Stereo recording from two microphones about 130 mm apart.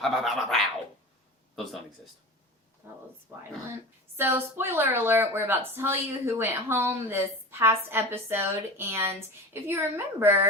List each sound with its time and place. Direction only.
0.0 s dog: centre (ahead or behind)
2.8 s a sound: 20° right (ahead or behind)
4.2 s a woman's voice: 20° right (ahead or behind)